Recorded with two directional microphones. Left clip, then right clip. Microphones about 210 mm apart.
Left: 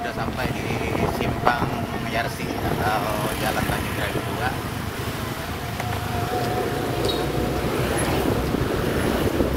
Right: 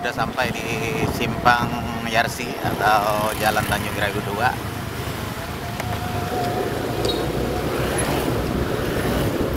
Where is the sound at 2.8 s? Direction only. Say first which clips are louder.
Right 8 dB; 35° right (ahead or behind).